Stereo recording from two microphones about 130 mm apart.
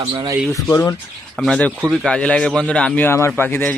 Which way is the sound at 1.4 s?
10° left (ahead or behind).